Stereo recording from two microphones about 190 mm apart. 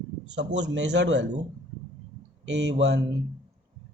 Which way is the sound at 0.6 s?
70° right (ahead or behind).